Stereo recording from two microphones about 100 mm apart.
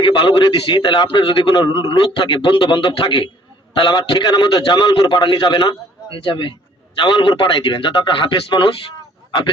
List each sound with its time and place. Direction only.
0.0 s a man's voice: 55° left (ahead or behind)